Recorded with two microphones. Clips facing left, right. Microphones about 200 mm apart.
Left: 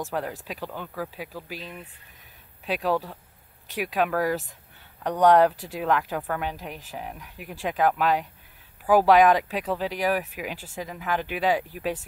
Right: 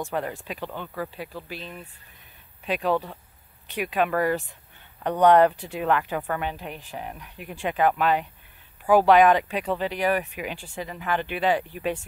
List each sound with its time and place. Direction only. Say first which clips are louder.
0.0 s speech: right 1 dB; centre (ahead or behind)